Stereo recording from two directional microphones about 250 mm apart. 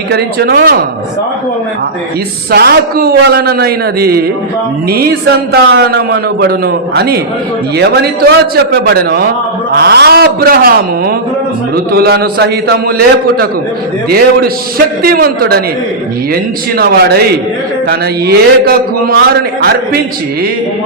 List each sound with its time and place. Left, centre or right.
0.1 s a man's voice: right
2.5 s a man's voice: right
15.0 s a man's voice: right